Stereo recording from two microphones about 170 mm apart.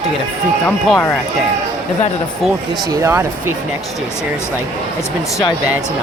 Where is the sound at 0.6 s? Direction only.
10° left (ahead or behind).